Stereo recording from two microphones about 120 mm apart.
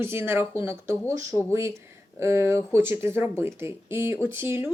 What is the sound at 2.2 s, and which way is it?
Speech, 20° right (ahead or behind).